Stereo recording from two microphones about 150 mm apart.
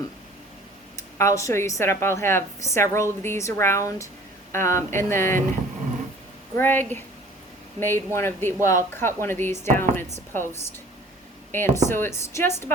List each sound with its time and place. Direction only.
0.9 s a woman's voice: 20° left (ahead or behind)
6.6 s speech: 15° left (ahead or behind)